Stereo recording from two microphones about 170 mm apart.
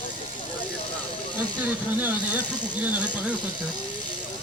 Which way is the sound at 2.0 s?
10° right (ahead or behind).